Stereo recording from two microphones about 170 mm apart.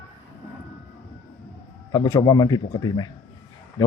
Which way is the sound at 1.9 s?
25° left (ahead or behind).